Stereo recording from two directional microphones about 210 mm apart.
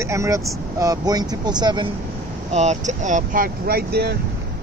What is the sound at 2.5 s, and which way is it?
Speech, 35° right (ahead or behind).